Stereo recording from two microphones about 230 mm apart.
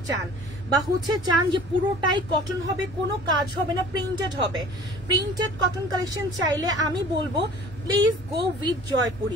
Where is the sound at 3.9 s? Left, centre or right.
Centre.